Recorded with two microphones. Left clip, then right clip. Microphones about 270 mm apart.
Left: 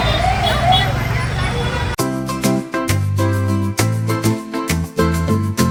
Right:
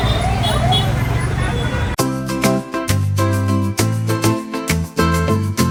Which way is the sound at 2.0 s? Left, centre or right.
Centre.